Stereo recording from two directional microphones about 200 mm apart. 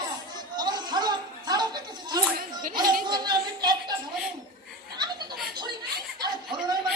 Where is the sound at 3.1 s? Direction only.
20° right (ahead or behind).